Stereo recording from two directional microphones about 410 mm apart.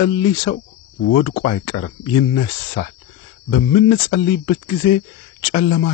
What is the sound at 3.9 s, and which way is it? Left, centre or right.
Speech, centre.